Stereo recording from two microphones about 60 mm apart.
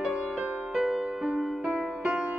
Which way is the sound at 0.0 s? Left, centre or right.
Centre.